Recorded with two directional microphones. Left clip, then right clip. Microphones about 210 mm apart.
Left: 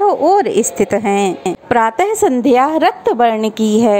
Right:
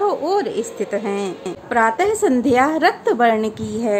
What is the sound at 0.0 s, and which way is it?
A woman's voice, 25° left (ahead or behind).